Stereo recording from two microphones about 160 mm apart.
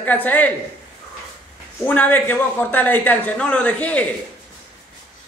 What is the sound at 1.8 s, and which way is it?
A man's voice, 10° left (ahead or behind).